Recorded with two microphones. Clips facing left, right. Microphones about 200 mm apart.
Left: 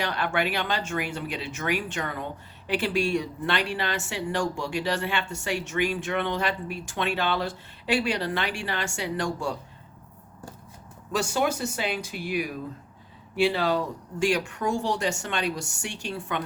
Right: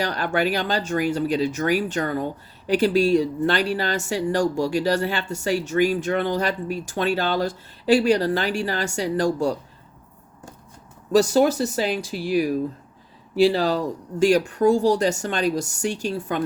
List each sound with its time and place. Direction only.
0.0 s speech: 40° right (ahead or behind)
11.1 s speech: 35° right (ahead or behind)